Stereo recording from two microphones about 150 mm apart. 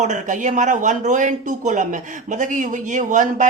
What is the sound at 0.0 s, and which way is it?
Speech, 55° right (ahead or behind).